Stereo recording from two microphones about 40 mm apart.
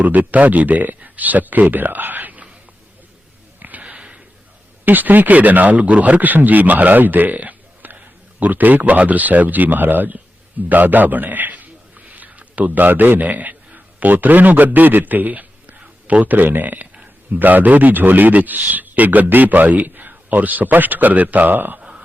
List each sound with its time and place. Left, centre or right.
0.0 s speech: right
3.6 s sniff: right
3.8 s sniff: right
4.9 s speech: right
10.7 s a sound: right
13.2 s a man's voice: right
21.5 s speech: right
21.8 s a sound: right